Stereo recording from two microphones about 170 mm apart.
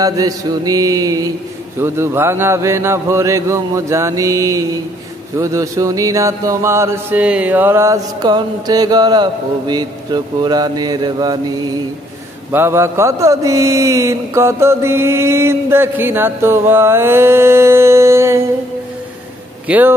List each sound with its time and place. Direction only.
0.0 s mantra: 20° right (ahead or behind)
19.7 s mantra: 10° right (ahead or behind)